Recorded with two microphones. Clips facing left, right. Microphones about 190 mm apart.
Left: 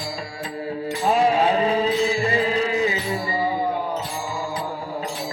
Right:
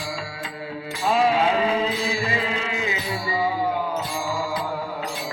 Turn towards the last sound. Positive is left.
turn(degrees=35)  # may be behind; listen again after turning